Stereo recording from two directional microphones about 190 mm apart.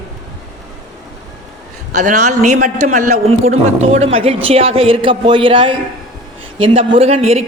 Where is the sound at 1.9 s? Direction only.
40° right (ahead or behind).